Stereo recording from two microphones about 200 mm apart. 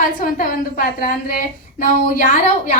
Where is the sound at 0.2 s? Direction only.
45° left (ahead or behind).